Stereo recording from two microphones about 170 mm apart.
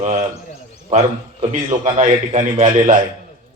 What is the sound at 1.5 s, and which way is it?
A man's voice, 45° right (ahead or behind).